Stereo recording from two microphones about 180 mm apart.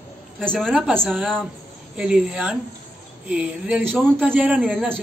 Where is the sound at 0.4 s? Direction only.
5° left (ahead or behind).